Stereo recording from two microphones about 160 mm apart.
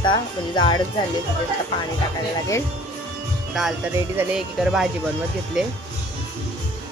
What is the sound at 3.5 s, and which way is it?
Speech, 5° right (ahead or behind).